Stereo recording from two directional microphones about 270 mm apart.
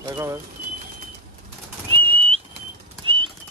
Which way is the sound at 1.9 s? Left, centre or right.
Right.